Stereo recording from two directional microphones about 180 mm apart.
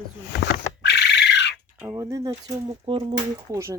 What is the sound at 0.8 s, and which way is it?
Bird, 70° left (ahead or behind).